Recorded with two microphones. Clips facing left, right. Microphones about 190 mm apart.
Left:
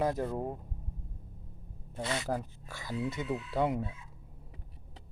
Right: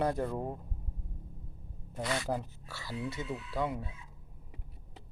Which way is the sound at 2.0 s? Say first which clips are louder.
Even; 25° left (ahead or behind).